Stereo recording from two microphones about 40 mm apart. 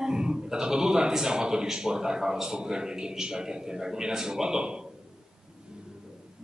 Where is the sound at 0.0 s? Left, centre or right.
Centre.